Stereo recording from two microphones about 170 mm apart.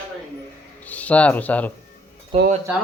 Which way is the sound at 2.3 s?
40° right (ahead or behind).